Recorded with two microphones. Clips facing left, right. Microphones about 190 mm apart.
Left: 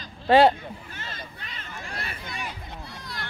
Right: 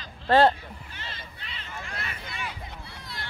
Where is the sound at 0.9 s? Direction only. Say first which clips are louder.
Left 3 dB; 45° left (ahead or behind).